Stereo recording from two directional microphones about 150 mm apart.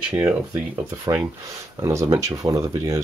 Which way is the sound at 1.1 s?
25° right (ahead or behind).